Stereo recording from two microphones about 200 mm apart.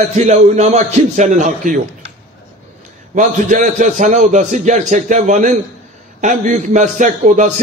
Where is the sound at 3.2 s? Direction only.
40° right (ahead or behind).